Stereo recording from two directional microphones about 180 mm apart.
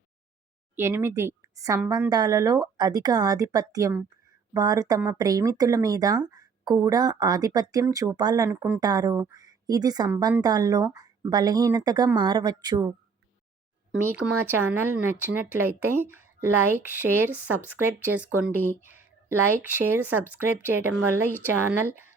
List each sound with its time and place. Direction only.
0.8 s speech: 15° right (ahead or behind)
13.9 s speech: 10° right (ahead or behind)
19.6 s speech: 10° right (ahead or behind)